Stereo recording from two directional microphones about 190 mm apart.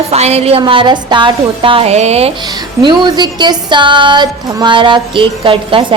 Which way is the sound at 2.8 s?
25° right (ahead or behind).